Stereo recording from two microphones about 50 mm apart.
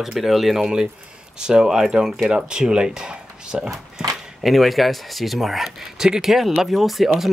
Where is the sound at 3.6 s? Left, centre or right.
Centre.